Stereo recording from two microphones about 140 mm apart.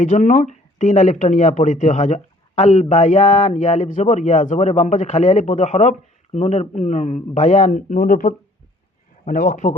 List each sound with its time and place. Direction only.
0.0 s speech: 60° left (ahead or behind)